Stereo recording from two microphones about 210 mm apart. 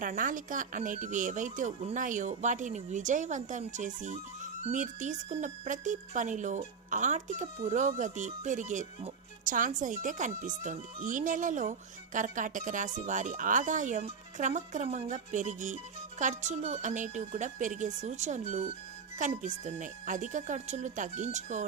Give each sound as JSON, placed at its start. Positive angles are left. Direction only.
{"t": 0.0, "sound": "speech", "side_deg": -40}